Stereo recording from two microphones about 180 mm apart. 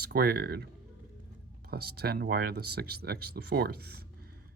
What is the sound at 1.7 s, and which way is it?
Speech, 60° right (ahead or behind).